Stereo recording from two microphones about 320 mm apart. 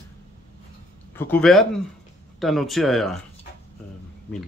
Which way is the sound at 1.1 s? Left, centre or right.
Centre.